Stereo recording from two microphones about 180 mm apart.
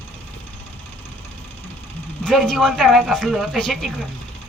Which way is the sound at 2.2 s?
Centre (ahead or behind).